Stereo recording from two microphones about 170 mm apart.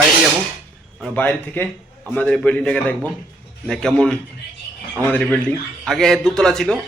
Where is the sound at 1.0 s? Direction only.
10° left (ahead or behind).